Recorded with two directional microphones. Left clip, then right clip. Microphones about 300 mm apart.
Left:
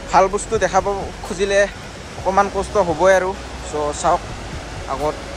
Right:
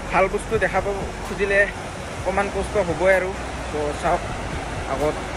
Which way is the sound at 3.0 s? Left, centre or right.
Centre.